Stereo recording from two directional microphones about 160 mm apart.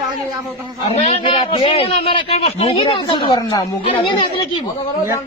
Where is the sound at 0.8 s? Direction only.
40° left (ahead or behind).